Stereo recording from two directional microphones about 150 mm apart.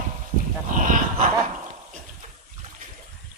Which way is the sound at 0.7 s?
60° right (ahead or behind).